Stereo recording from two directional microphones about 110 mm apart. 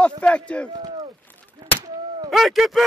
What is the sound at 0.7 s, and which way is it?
Speech, 35° right (ahead or behind).